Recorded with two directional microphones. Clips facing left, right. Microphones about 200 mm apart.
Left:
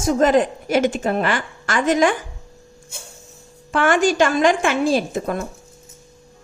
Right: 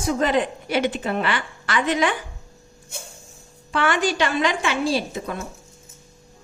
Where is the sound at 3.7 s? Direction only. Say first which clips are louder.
Left 5 dB; 45° left (ahead or behind).